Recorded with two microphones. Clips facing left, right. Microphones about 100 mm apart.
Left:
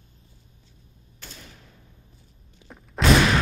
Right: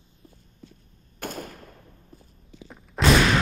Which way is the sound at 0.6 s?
60° right (ahead or behind).